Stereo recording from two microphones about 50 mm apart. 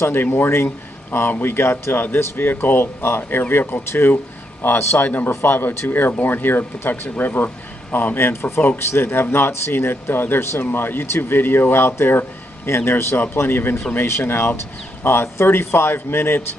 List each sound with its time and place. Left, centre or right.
0.0 s speech: left